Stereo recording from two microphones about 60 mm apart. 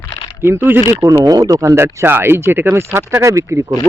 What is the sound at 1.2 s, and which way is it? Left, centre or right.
Speech, right.